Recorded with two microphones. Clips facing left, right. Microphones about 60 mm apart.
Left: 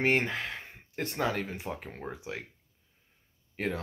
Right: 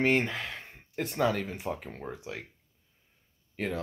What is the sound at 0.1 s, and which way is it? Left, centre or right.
Speech, centre.